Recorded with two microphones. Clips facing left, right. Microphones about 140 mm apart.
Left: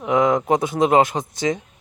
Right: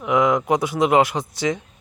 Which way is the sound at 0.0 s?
25° left (ahead or behind).